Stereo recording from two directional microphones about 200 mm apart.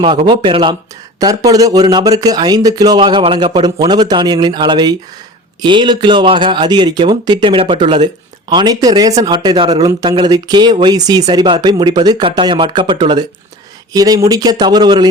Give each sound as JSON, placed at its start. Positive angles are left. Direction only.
{"t": 0.0, "sound": "speech", "side_deg": -25}